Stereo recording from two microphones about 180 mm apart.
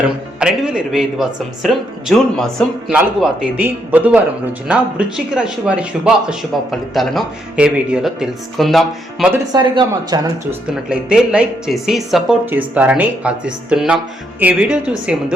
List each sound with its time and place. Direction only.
0.3 s a man's voice: 5° right (ahead or behind)
9.3 s speech: 20° right (ahead or behind)
10.5 s a woman's voice: 5° right (ahead or behind)